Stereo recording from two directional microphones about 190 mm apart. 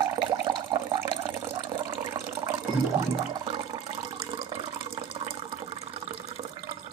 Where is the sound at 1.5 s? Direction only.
25° right (ahead or behind).